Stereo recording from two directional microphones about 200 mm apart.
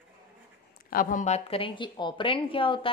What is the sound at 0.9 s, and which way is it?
A woman's voice, 40° left (ahead or behind).